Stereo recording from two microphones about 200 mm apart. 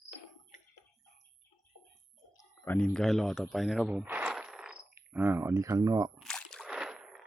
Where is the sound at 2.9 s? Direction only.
Centre (ahead or behind); by 6.1 s 20° right (ahead or behind).